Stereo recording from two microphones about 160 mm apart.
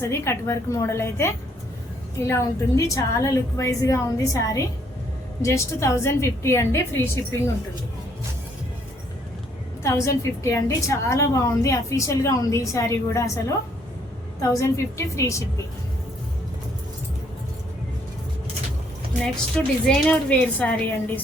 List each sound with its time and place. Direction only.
0.0 s a woman's voice: 15° left (ahead or behind)
9.8 s a woman's voice: 20° left (ahead or behind)
14.4 s a woman's voice: 20° left (ahead or behind)
19.2 s a woman's voice: 5° left (ahead or behind)